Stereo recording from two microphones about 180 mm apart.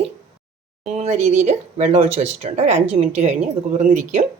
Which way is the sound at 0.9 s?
40° right (ahead or behind).